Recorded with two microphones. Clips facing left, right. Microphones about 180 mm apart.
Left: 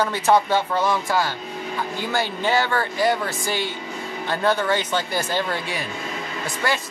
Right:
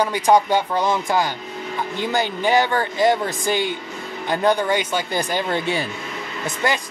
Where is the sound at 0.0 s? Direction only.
15° right (ahead or behind).